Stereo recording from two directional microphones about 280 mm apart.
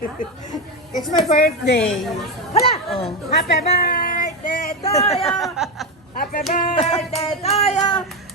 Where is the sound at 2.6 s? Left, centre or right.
Left.